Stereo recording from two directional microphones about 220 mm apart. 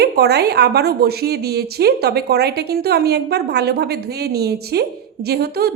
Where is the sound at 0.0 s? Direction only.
45° right (ahead or behind).